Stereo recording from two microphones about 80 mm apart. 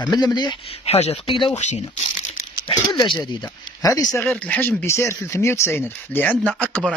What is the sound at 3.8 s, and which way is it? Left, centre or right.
Speech, left.